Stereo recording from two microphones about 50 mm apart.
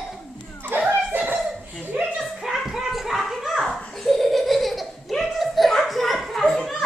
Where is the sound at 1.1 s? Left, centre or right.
Right.